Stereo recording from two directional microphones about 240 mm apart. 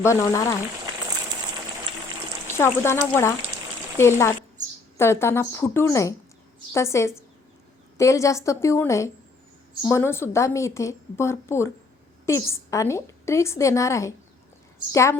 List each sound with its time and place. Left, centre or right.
0.0 s a woman's voice: centre
2.6 s a woman's voice: centre